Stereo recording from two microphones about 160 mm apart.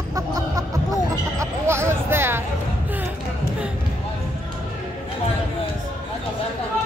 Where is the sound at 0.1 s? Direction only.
20° right (ahead or behind).